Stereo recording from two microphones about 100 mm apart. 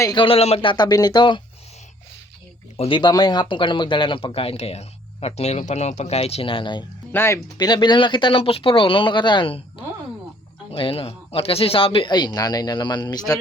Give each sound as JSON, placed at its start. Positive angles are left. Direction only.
{"t": 0.1, "sound": "speech", "side_deg": 55}
{"t": 0.3, "sound": "speech", "side_deg": 90}
{"t": 0.7, "sound": "a man's voice", "side_deg": 45}
{"t": 2.7, "sound": "speech", "side_deg": 85}
{"t": 3.0, "sound": "speech", "side_deg": 45}
{"t": 7.1, "sound": "speech", "side_deg": 25}
{"t": 7.6, "sound": "speech", "side_deg": 50}
{"t": 10.7, "sound": "a man's voice", "side_deg": 65}